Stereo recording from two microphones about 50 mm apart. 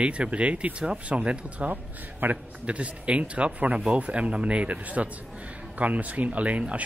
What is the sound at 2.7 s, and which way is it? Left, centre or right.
Speech, right.